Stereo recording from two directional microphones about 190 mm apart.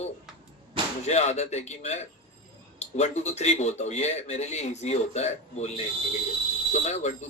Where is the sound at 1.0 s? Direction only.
35° left (ahead or behind).